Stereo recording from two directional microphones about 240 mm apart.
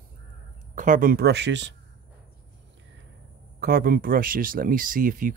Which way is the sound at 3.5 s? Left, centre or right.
Right.